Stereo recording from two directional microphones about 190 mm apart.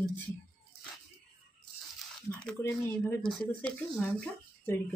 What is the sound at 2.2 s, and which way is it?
Speech, 10° left (ahead or behind).